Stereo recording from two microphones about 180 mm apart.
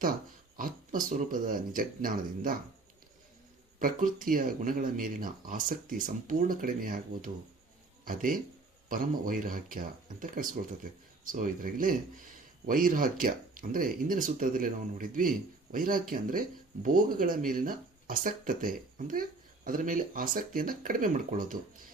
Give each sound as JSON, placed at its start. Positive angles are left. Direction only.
{"t": 0.5, "sound": "speech", "side_deg": -50}
{"t": 3.8, "sound": "speech", "side_deg": -50}